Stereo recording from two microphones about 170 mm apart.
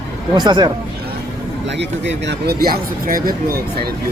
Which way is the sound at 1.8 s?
90° right.